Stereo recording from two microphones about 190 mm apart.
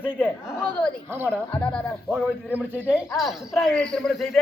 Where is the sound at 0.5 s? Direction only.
5° left (ahead or behind).